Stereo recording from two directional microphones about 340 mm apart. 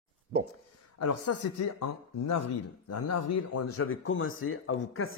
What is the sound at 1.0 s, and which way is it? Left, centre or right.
Speech, left.